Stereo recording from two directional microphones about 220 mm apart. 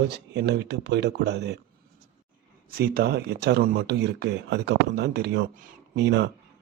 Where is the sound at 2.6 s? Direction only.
45° right (ahead or behind).